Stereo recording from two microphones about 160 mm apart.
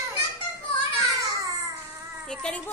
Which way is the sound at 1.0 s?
20° right (ahead or behind).